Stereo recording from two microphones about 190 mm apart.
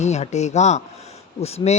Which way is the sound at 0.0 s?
35° left (ahead or behind).